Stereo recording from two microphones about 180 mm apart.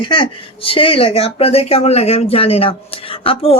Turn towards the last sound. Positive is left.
turn(degrees=30)  # may be behind; listen again after turning